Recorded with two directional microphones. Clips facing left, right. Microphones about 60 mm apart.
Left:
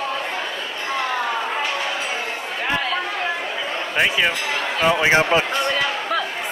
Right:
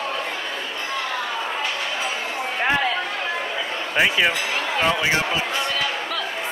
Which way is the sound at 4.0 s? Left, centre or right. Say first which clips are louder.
Even; centre.